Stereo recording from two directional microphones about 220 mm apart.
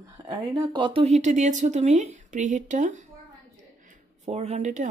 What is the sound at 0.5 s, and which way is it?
Speech, 20° right (ahead or behind).